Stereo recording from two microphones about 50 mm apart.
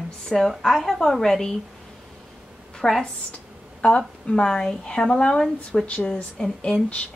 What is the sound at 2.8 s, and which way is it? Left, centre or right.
Speech, centre.